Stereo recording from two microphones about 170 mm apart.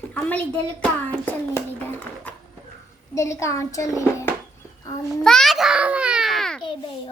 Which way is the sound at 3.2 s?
15° left (ahead or behind).